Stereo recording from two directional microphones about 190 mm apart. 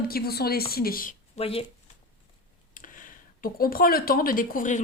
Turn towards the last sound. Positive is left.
turn(degrees=45)  # may be behind; listen again after turning